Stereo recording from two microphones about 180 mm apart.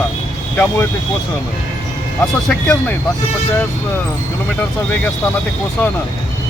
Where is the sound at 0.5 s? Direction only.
10° left (ahead or behind).